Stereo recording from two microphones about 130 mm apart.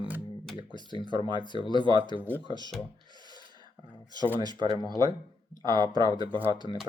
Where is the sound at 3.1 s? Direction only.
35° right (ahead or behind).